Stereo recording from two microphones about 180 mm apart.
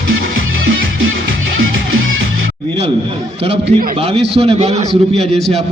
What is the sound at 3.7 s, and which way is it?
A man's voice, 35° right (ahead or behind).